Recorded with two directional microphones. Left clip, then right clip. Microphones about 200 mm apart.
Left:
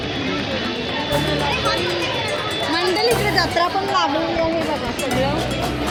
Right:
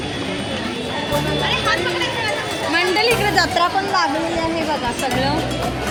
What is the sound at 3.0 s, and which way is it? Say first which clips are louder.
Music: right 1 dB; 15° right (ahead or behind).